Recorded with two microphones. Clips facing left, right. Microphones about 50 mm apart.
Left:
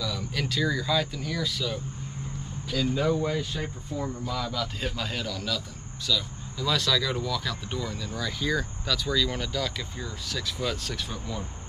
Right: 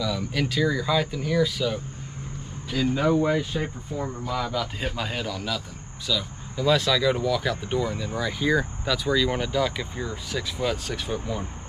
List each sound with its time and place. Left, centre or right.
0.0 s speech: centre